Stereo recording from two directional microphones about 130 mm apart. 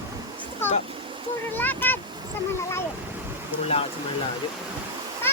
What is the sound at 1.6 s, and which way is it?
Vehicle, 15° left (ahead or behind).